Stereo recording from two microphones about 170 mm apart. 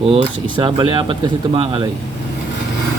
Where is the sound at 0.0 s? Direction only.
35° right (ahead or behind).